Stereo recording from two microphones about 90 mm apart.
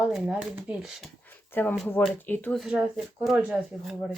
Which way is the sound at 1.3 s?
20° left (ahead or behind).